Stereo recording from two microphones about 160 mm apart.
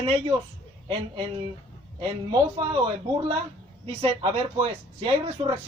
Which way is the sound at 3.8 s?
35° right (ahead or behind).